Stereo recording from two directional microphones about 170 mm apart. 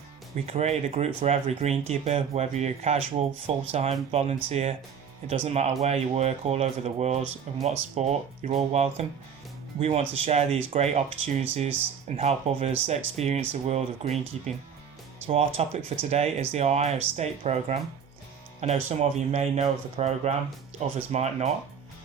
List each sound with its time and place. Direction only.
0.3 s speech: 40° right (ahead or behind)